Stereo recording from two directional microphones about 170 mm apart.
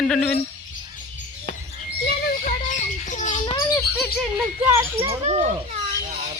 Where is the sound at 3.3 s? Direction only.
30° left (ahead or behind).